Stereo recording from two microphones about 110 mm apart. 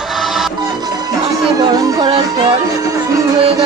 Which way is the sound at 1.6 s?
40° right (ahead or behind).